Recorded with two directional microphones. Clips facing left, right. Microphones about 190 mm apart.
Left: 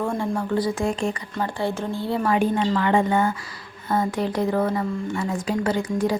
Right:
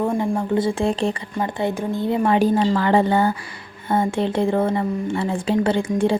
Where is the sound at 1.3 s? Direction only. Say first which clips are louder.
Right 3 dB; 15° right (ahead or behind).